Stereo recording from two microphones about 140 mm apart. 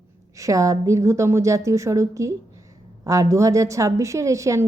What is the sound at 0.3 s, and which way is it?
A woman's voice, 25° right (ahead or behind).